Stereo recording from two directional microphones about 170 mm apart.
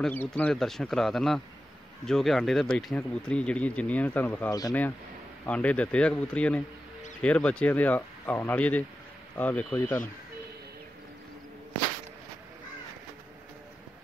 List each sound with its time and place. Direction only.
0.0 s speech: 10° left (ahead or behind)
5.5 s speech: 10° left (ahead or behind)